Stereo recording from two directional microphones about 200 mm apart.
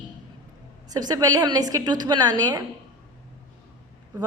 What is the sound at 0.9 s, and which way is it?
A woman's voice, 20° right (ahead or behind).